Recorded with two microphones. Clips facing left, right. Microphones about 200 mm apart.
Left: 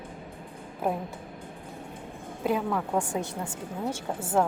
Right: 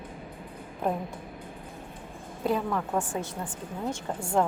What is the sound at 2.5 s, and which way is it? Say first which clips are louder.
A woman's voice: even; 10° left (ahead or behind).